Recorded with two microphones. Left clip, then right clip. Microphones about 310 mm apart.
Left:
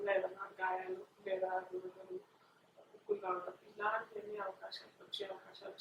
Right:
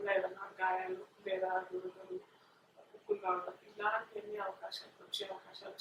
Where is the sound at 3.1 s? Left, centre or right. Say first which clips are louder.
Right 3 dB; centre.